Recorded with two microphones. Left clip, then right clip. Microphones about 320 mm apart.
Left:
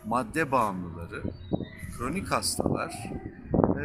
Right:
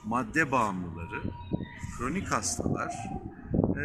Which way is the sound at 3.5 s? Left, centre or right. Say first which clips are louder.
Left 5 dB; left.